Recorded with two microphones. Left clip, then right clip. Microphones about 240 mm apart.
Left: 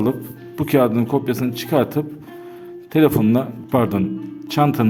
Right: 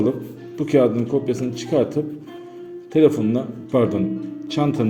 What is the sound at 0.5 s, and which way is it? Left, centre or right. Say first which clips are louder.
A man's voice: even; left.